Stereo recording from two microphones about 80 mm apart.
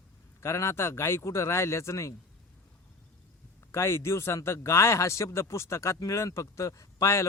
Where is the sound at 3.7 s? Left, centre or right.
Left.